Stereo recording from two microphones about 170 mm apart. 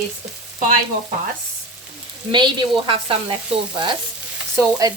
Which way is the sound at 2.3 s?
25° right (ahead or behind).